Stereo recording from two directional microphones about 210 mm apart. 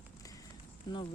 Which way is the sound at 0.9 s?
20° left (ahead or behind).